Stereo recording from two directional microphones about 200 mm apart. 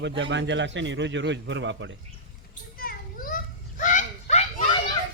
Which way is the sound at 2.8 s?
45° left (ahead or behind).